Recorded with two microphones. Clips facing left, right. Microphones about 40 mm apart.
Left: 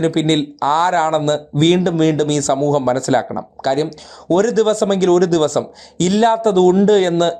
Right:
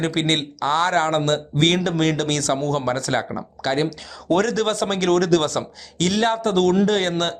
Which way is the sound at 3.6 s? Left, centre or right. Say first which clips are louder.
Left 4 dB; right.